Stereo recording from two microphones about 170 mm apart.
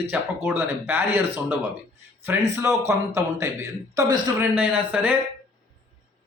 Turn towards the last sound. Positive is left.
turn(degrees=-10)  # may be behind; listen again after turning